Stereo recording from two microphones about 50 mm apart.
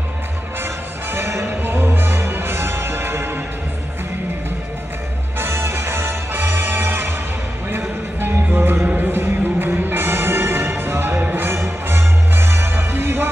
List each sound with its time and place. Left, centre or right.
1.1 s music: right
5.4 s music: right
8.2 s music: right